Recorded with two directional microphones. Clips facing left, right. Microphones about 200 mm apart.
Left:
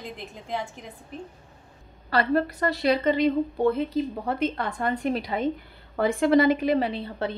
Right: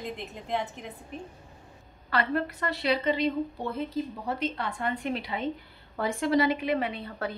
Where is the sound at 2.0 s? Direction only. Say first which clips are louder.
Left 5 dB; 35° left (ahead or behind).